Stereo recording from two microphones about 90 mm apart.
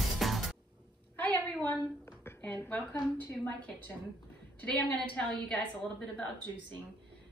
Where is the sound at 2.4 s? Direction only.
15° left (ahead or behind).